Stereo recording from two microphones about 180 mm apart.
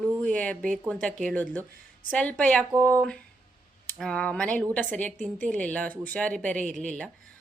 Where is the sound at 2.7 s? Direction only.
15° right (ahead or behind).